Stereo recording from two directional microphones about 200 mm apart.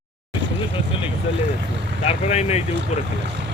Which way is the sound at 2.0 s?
30° left (ahead or behind).